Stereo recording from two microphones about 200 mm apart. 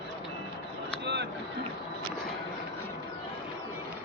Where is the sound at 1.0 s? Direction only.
60° right (ahead or behind).